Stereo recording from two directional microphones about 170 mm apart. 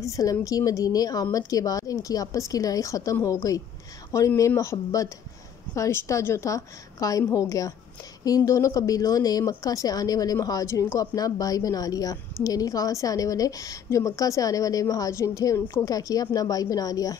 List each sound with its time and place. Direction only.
0.0 s a woman's voice: 20° left (ahead or behind)